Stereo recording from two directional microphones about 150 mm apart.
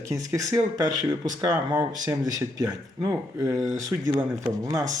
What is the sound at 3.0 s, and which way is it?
Speech, 20° right (ahead or behind).